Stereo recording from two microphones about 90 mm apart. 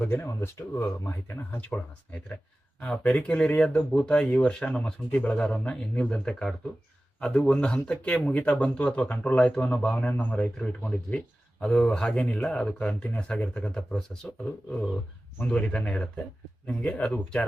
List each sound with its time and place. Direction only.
0.0 s speech: 25° left (ahead or behind)
2.8 s a man's voice: 10° left (ahead or behind)